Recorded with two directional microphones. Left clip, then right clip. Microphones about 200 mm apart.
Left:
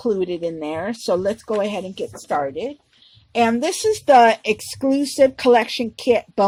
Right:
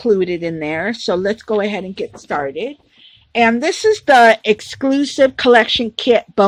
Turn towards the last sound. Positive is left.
turn(degrees=-35)  # may be behind; listen again after turning